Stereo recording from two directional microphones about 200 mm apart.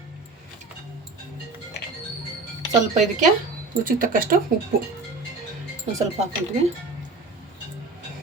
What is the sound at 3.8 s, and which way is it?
Speech, 45° right (ahead or behind).